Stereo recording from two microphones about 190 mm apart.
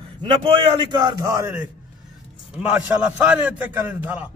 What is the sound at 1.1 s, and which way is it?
A man's voice, 20° right (ahead or behind).